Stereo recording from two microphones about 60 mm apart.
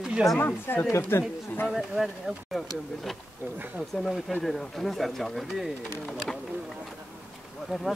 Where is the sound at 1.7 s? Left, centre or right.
Centre.